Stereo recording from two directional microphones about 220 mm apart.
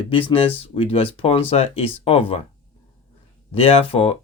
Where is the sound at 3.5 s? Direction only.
25° left (ahead or behind).